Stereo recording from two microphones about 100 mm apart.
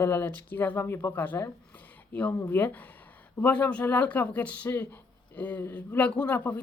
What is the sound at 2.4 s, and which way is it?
Speech, 15° left (ahead or behind).